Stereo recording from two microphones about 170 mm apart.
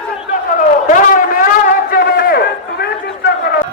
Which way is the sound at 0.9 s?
50° left (ahead or behind).